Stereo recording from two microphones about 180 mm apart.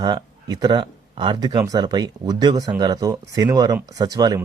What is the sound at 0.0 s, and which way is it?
Speech, 25° right (ahead or behind).